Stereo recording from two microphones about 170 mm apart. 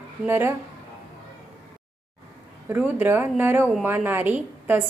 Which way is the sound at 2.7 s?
10° right (ahead or behind).